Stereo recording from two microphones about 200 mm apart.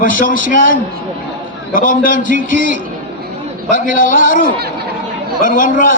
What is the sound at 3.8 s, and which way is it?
A man's voice, 45° left (ahead or behind).